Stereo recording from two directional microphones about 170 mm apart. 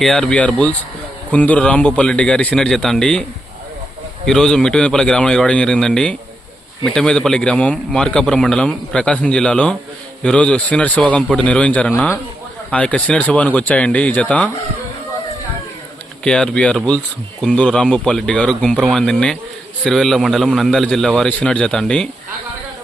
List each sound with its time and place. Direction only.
0.0 s a man's voice: 5° left (ahead or behind)
4.3 s a man's voice: 5° left (ahead or behind)
16.2 s a man's voice: 5° left (ahead or behind)